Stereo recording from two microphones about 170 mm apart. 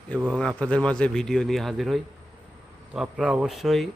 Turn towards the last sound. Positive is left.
turn(degrees=0)  # may be behind; listen again after turning